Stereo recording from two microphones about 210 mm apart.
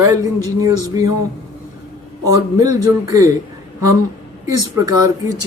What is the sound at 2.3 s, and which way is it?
Speech, 15° right (ahead or behind).